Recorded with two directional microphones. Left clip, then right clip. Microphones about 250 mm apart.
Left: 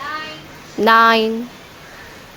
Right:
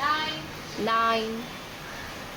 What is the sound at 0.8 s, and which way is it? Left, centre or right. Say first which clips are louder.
Speech: left 13 dB; left.